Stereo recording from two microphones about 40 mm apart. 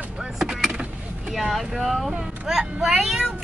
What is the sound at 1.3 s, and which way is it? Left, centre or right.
Speech, centre.